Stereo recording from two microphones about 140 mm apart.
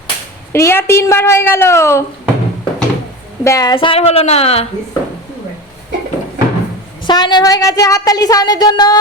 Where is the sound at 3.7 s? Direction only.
40° left (ahead or behind).